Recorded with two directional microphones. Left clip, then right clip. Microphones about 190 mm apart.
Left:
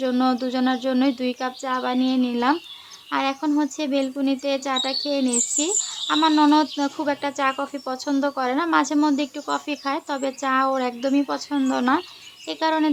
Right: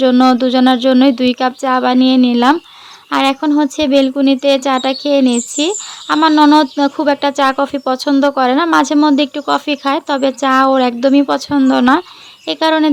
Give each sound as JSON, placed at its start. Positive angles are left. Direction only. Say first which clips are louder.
{"t": 0.0, "sound": "speech", "louder": "right 12 dB", "side_deg": -40}